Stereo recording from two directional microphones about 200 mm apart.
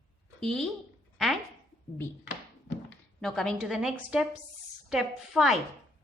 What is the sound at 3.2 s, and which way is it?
A woman's voice, centre (ahead or behind).